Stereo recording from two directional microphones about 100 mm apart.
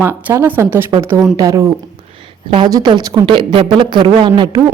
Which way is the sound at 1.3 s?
35° right (ahead or behind).